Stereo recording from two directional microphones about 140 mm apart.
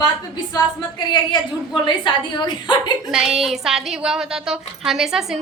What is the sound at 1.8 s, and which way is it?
Speech, 35° left (ahead or behind).